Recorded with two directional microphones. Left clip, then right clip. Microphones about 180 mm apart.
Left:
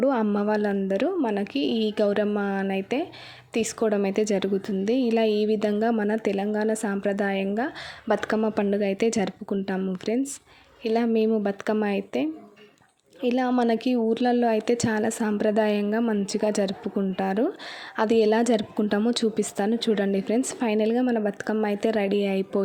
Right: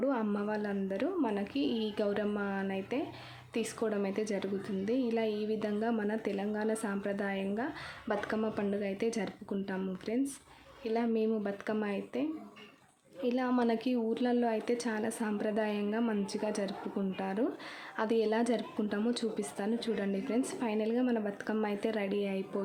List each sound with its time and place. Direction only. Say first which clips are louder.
0.0 s a woman's voice: left 10 dB; 40° left (ahead or behind)